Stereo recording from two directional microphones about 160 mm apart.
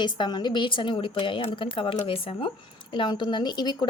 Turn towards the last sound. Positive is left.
turn(degrees=25)  # may be behind; listen again after turning